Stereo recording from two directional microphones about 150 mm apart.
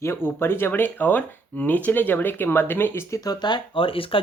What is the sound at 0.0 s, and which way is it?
Speech, 15° left (ahead or behind).